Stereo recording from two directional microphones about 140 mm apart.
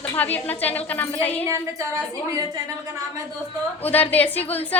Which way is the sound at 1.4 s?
20° right (ahead or behind).